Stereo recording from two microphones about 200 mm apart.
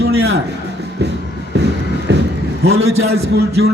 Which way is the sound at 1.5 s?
60° right (ahead or behind).